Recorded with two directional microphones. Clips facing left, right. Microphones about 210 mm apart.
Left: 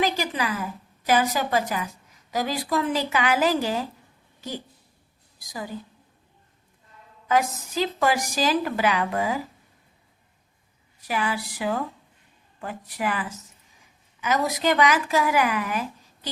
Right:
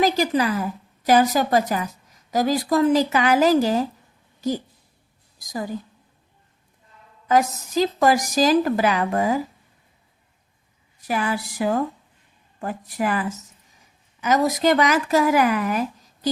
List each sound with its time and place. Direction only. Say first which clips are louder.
0.0 s a woman's voice: right 6 dB; 40° right (ahead or behind)
4.4 s a sound: right 10 dB; 40° right (ahead or behind)
5.5 s speech: right 6 dB; 45° right (ahead or behind)
7.3 s a woman's voice: right 4 dB; 40° right (ahead or behind)
11.0 s a woman's voice: right 3 dB; 45° right (ahead or behind)